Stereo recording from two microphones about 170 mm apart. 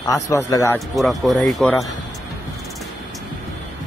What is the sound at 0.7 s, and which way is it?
Speech, centre (ahead or behind).